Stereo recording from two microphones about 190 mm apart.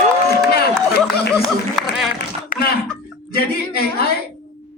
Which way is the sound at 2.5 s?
45° left (ahead or behind).